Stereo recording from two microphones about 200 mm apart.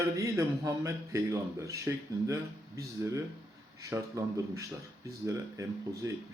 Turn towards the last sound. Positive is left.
turn(degrees=-15)  # may be behind; listen again after turning